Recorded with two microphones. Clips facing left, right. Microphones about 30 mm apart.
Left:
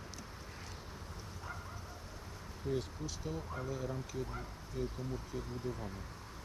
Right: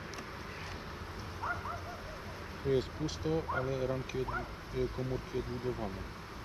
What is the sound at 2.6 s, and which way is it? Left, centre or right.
Speech, right.